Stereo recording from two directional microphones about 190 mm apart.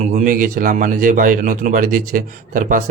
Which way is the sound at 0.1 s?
40° right (ahead or behind).